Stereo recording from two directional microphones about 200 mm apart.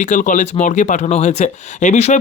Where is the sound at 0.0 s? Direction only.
40° left (ahead or behind).